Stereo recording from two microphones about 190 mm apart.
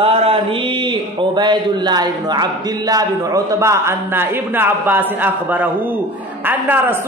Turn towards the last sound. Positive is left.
turn(degrees=-10)  # may be behind; listen again after turning